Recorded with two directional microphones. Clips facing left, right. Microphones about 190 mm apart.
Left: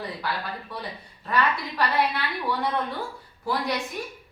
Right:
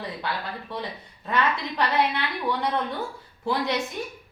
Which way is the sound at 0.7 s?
25° right (ahead or behind).